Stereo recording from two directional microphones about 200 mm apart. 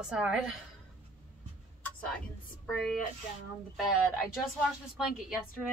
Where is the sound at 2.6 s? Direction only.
Centre (ahead or behind).